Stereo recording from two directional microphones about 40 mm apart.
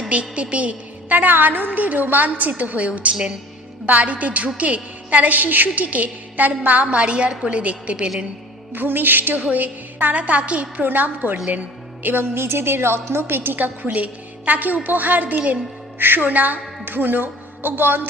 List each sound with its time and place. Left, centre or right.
0.1 s a woman's voice: right
6.8 s a woman's voice: right
8.7 s music: right
9.5 s a woman's voice: right
10.8 s speech: right
12.0 s a woman's voice: right
13.6 s a woman's voice: right